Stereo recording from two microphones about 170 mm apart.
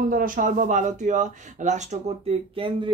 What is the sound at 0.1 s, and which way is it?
Speech, 55° right (ahead or behind).